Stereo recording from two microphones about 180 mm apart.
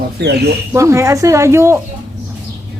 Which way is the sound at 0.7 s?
15° right (ahead or behind).